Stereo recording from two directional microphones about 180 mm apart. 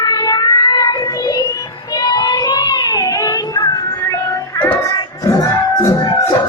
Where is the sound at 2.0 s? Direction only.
20° left (ahead or behind).